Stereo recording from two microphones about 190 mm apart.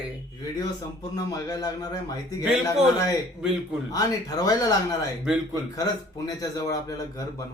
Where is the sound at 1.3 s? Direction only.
20° left (ahead or behind).